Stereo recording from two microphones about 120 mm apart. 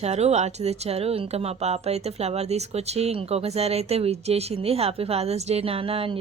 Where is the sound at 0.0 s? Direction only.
65° right (ahead or behind).